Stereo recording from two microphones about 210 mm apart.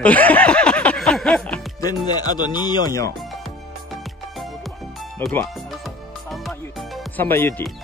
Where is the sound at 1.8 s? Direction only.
20° left (ahead or behind).